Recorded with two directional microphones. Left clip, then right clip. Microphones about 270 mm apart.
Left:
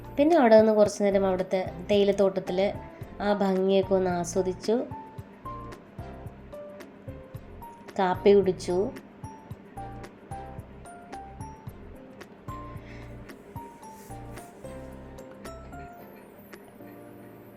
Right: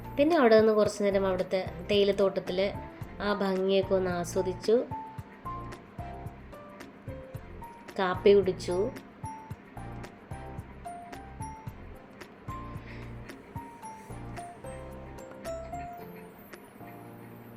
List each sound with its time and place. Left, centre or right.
0.2 s a woman's voice: centre
7.9 s a woman's voice: centre